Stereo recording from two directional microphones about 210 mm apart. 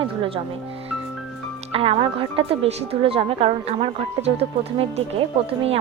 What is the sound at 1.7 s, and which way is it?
A woman's voice, 25° right (ahead or behind).